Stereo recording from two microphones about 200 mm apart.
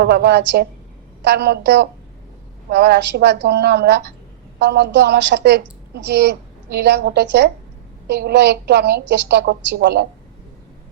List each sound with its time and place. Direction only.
0.0 s a woman's voice: 55° right (ahead or behind)